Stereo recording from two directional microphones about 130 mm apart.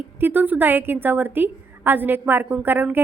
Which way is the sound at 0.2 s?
15° right (ahead or behind).